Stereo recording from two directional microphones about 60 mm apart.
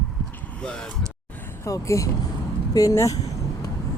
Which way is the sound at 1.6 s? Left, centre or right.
Left.